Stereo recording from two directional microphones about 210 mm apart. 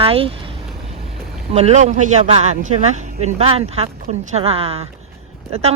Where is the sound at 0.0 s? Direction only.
25° right (ahead or behind).